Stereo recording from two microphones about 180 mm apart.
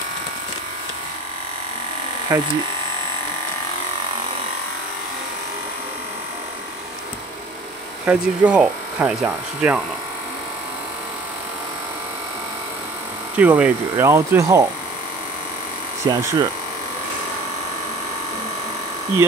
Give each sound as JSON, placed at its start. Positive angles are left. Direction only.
{"t": 2.3, "sound": "speech", "side_deg": -15}
{"t": 8.0, "sound": "speech", "side_deg": -10}
{"t": 13.4, "sound": "speech", "side_deg": -10}
{"t": 16.1, "sound": "speech", "side_deg": -20}